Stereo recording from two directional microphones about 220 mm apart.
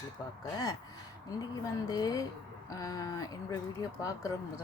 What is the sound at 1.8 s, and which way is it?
Speech, 15° left (ahead or behind).